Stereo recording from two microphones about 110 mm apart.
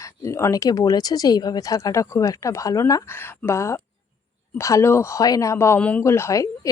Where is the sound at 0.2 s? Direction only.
25° left (ahead or behind).